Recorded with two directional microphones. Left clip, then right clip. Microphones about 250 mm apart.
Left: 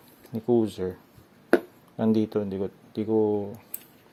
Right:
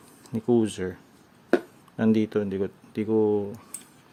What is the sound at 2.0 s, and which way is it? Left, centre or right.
Speech, centre.